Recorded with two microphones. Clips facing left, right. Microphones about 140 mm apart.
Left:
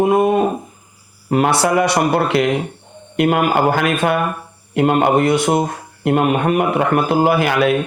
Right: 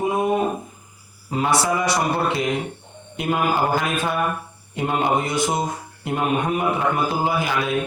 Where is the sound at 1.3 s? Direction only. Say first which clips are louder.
Left 6 dB; 65° left (ahead or behind).